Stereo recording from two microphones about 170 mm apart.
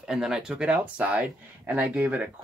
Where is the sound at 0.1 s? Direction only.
Centre (ahead or behind).